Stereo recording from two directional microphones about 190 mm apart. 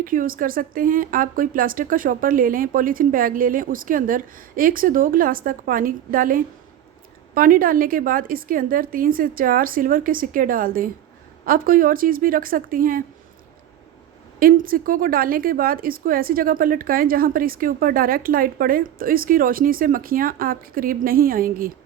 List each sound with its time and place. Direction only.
0.0 s a woman's voice: 45° right (ahead or behind)
14.3 s a woman's voice: 50° right (ahead or behind)